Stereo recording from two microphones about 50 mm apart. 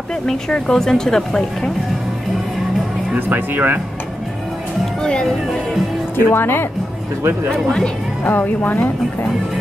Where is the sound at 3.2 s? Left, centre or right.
Right.